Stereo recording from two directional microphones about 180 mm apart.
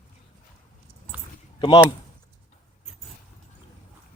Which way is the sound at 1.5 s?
25° left (ahead or behind).